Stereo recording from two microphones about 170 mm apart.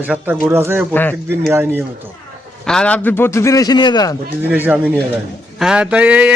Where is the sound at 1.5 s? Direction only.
15° right (ahead or behind).